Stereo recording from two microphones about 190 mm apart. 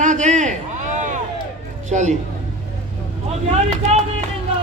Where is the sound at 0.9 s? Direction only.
40° right (ahead or behind).